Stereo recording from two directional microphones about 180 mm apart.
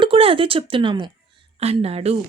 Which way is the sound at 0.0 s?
30° right (ahead or behind).